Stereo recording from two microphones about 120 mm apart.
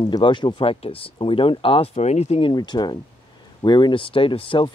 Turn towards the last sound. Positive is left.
turn(degrees=45)  # may be behind; listen again after turning